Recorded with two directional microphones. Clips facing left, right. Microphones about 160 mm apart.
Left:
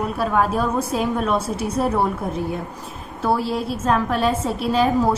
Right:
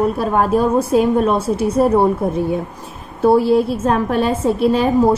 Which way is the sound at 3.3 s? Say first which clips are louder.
Right 10 dB; 50° right (ahead or behind).